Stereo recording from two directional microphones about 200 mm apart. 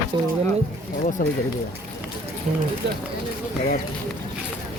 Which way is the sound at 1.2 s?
45° left (ahead or behind).